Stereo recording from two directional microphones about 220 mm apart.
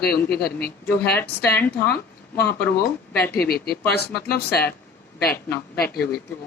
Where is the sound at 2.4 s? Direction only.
10° left (ahead or behind).